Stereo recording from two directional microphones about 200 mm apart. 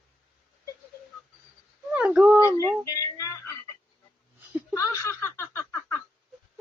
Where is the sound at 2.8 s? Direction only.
15° left (ahead or behind).